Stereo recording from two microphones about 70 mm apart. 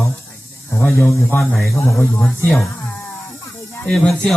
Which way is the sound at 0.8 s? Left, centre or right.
Left.